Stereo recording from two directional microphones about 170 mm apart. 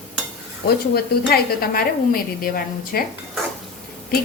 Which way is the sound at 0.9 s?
65° left (ahead or behind).